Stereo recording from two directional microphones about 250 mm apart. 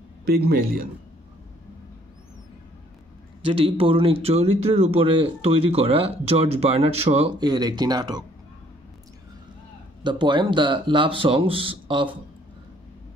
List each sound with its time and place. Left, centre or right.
0.2 s speech: right
3.4 s speech: right
10.0 s speech: centre